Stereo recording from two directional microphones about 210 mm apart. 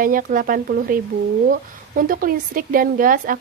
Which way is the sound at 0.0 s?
40° right (ahead or behind).